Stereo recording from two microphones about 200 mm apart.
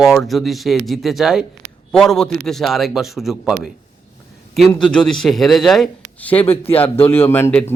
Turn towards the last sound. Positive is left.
turn(degrees=10)  # may be behind; listen again after turning